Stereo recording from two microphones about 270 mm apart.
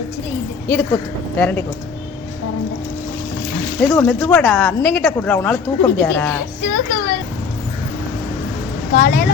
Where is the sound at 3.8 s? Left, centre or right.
Centre.